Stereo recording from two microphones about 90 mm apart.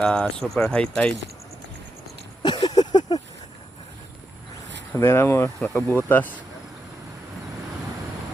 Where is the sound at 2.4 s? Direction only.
55° left (ahead or behind).